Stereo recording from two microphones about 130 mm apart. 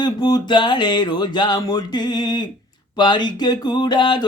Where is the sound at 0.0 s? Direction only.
30° left (ahead or behind).